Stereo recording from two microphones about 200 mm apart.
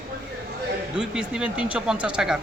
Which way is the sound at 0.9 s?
5° right (ahead or behind).